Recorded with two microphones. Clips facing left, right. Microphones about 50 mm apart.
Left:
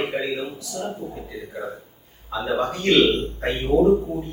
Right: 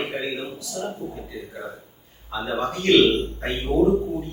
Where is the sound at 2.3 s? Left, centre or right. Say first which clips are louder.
Left 3 dB; centre.